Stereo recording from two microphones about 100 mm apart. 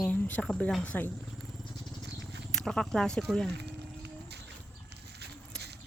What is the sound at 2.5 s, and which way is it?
Speech, 5° left (ahead or behind).